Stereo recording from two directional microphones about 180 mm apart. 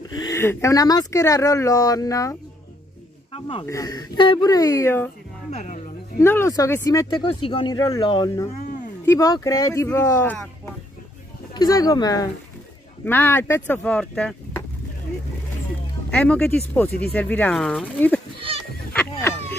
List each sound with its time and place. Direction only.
0.1 s speech: 20° left (ahead or behind)
3.6 s speech: 20° left (ahead or behind)
5.5 s speech: 40° left (ahead or behind)
6.1 s speech: 15° left (ahead or behind)
16.1 s speech: 5° left (ahead or behind)